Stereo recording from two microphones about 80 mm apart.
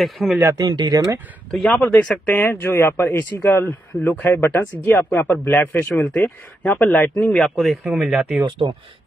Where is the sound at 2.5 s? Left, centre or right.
Left.